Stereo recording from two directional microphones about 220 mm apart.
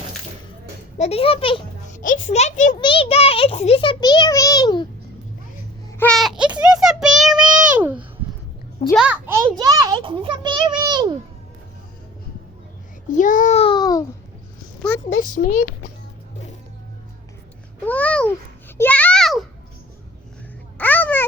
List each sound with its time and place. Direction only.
0.9 s a child's voice: 30° left (ahead or behind)
2.0 s a child's voice: 35° left (ahead or behind)
2.7 s a child's voice: 20° left (ahead or behind)
6.0 s a sound: centre (ahead or behind)
6.6 s child singing: centre (ahead or behind)
7.6 s a sound: 5° right (ahead or behind)
9.0 s a child's voice: 10° right (ahead or behind)
13.1 s a child's voice: 35° left (ahead or behind); by 14.0 s 20° left (ahead or behind)
14.8 s a sound: 10° left (ahead or behind)
17.8 s a child's voice: 5° left (ahead or behind)
18.8 s a sound: 5° left (ahead or behind)
20.7 s babbling: 10° left (ahead or behind)